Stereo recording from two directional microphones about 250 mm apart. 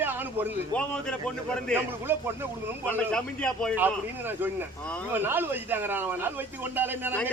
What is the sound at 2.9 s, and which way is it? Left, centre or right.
Speech, centre.